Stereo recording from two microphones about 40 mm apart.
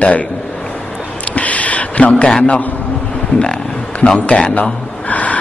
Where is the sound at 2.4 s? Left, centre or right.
Left.